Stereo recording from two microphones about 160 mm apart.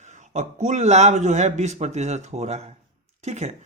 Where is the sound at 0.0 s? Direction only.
50° right (ahead or behind).